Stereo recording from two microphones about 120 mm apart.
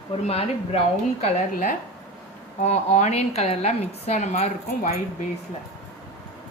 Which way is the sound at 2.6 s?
65° left (ahead or behind).